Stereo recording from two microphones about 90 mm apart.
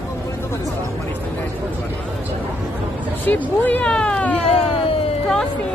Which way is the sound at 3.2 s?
20° left (ahead or behind).